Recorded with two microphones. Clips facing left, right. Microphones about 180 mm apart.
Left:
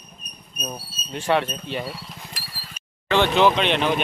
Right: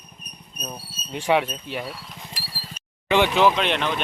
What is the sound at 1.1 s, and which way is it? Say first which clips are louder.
Speech: right 1 dB; 15° right (ahead or behind).